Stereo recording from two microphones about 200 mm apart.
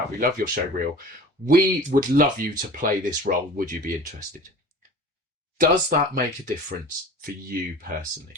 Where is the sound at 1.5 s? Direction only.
45° right (ahead or behind).